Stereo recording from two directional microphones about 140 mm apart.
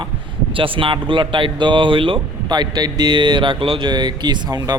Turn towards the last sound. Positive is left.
turn(degrees=-25)  # may be behind; listen again after turning